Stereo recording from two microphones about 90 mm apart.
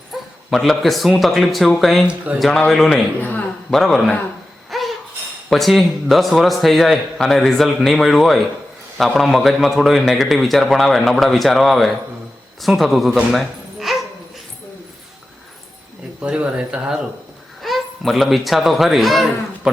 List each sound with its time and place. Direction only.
0.1 s a man's voice: centre (ahead or behind)
3.2 s speech: 20° left (ahead or behind)
3.7 s a man's voice: centre (ahead or behind)
4.7 s a sound: centre (ahead or behind)
5.5 s a man's voice: centre (ahead or behind)
16.2 s speech: 10° right (ahead or behind)